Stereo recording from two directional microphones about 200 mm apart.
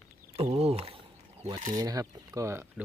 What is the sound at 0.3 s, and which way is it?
Speech, 30° right (ahead or behind).